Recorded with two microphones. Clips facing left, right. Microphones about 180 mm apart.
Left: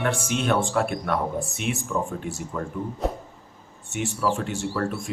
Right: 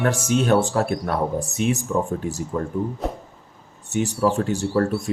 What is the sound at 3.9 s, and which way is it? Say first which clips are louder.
Speech: right 5 dB; 40° right (ahead or behind).